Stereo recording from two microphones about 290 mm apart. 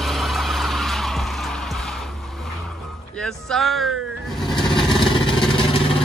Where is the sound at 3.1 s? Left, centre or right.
Centre.